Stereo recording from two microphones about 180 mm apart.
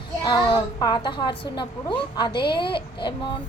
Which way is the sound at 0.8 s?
25° left (ahead or behind).